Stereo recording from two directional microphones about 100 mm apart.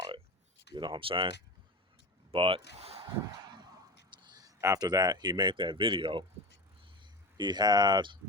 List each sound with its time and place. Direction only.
0.7 s speech: 50° right (ahead or behind)
2.3 s speech: 65° right (ahead or behind); by 3.0 s 90° right
3.4 s a sound: 45° right (ahead or behind)
7.0 s speech: 50° right (ahead or behind)